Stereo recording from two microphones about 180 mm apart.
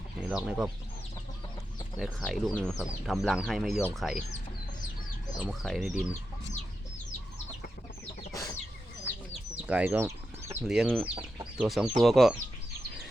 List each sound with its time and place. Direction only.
0.3 s speech: 5° right (ahead or behind)
2.0 s speech: centre (ahead or behind)
5.4 s speech: centre (ahead or behind)
8.3 s chicken: 20° left (ahead or behind)
9.3 s chicken: 5° right (ahead or behind)
10.5 s speech: 5° right (ahead or behind)